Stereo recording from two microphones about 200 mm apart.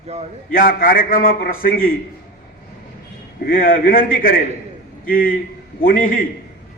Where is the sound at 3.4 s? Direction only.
45° left (ahead or behind).